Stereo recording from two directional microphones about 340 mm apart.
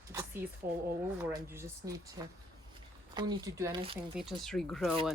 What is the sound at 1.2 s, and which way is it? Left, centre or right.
Speech, centre.